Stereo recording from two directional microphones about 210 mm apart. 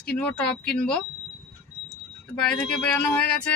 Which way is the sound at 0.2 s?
5° left (ahead or behind).